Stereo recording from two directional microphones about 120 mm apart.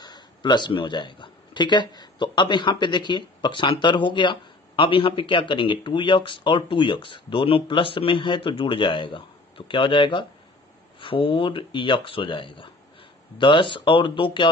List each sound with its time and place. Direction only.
0.0 s speech: 40° left (ahead or behind)